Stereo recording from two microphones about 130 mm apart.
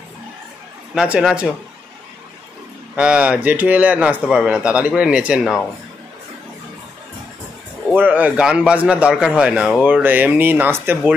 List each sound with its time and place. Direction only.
0.9 s a man's voice: 5° right (ahead or behind)
3.0 s a man's voice: 10° right (ahead or behind)
7.9 s a man's voice: 10° right (ahead or behind)